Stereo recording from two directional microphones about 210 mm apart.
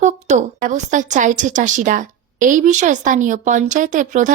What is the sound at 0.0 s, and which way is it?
Speech, 35° right (ahead or behind).